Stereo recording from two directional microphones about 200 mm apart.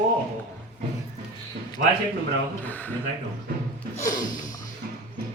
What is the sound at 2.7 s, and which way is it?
Speech, 10° left (ahead or behind).